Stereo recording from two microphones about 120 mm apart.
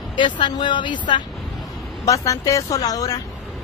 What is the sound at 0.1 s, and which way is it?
Speech, 40° left (ahead or behind).